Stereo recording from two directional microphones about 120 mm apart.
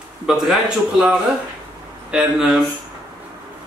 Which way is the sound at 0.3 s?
5° right (ahead or behind).